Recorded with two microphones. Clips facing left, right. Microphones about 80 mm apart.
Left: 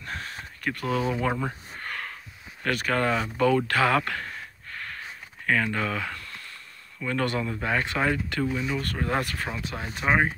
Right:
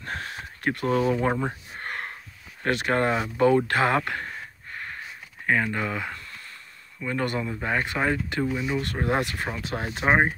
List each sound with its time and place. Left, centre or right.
0.0 s a sound: right
1.8 s wheeze: right
2.6 s speech: right